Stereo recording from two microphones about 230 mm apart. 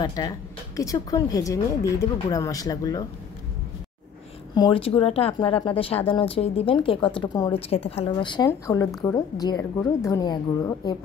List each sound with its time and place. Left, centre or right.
0.0 s speech: centre
4.6 s speech: left